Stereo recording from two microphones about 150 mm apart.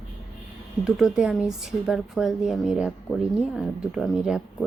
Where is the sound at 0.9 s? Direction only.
Centre (ahead or behind).